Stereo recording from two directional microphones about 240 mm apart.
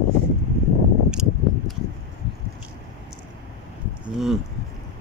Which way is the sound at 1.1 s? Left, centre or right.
Centre.